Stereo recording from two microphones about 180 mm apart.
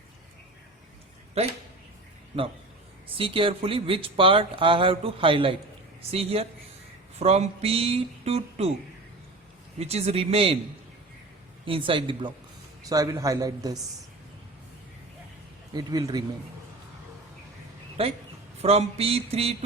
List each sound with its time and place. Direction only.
3.2 s speech: 30° right (ahead or behind)
9.7 s speech: 35° right (ahead or behind)
11.6 s speech: 30° right (ahead or behind)
15.7 s speech: 20° right (ahead or behind)
18.0 s speech: 35° right (ahead or behind)